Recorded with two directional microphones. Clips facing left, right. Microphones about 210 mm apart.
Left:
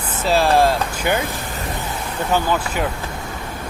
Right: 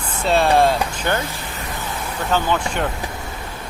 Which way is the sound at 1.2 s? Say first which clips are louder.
Left 3 dB; 45° left (ahead or behind).